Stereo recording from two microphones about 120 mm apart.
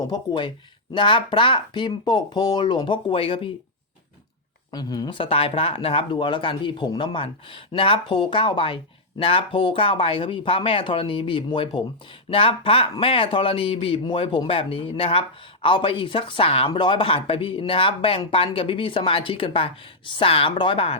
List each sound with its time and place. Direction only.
0.0 s speech: 40° left (ahead or behind)
4.7 s speech: 35° left (ahead or behind)
5.1 s speech: 50° left (ahead or behind)